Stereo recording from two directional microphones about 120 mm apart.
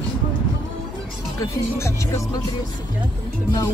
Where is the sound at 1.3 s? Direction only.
25° left (ahead or behind).